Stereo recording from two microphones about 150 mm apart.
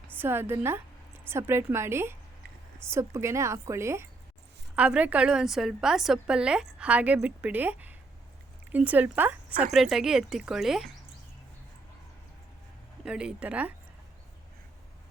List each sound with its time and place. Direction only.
0.1 s a woman's voice: 15° right (ahead or behind)
13.1 s a woman's voice: 5° right (ahead or behind)